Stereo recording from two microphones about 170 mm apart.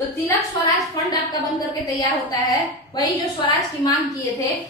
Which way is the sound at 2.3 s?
20° left (ahead or behind).